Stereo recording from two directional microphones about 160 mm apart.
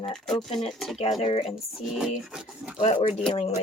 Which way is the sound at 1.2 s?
35° left (ahead or behind).